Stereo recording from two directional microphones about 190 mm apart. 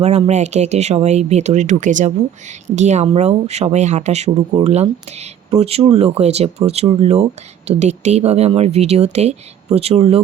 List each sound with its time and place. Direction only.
0.0 s speech: 35° right (ahead or behind)